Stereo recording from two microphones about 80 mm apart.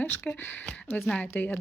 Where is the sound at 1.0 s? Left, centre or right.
Centre.